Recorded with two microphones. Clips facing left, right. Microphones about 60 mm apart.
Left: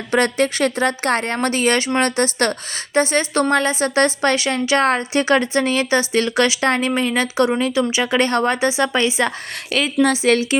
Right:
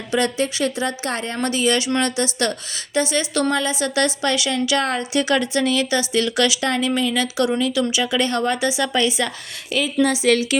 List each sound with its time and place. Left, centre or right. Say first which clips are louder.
0.1 s a woman's voice: left 3 dB; left
9.7 s a woman's voice: left 2 dB; left
10.2 s a woman's voice: left 1 dB; left